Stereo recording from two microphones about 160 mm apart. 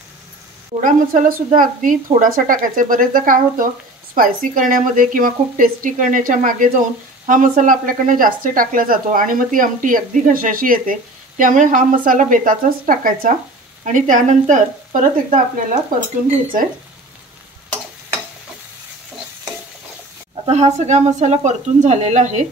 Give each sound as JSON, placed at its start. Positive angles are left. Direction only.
{"t": 0.7, "sound": "speech", "side_deg": -55}
{"t": 20.7, "sound": "speech", "side_deg": -45}